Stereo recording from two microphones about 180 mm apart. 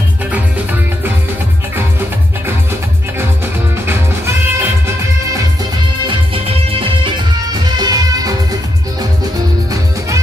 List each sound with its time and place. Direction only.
1.8 s music: 10° right (ahead or behind)
3.7 s music: 15° right (ahead or behind)
6.0 s music: 30° right (ahead or behind)
9.7 s music: 15° right (ahead or behind)